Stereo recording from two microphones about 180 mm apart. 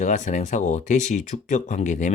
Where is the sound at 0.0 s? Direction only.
45° left (ahead or behind).